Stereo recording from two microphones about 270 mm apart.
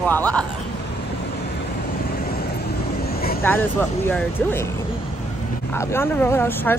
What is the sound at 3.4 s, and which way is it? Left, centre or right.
Speech, centre.